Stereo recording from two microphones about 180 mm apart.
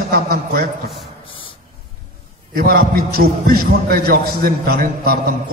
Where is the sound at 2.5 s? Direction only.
55° right (ahead or behind).